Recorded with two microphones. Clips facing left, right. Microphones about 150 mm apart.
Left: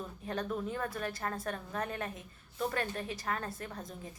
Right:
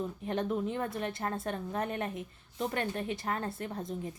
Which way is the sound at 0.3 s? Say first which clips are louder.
Right 3 dB; 20° right (ahead or behind).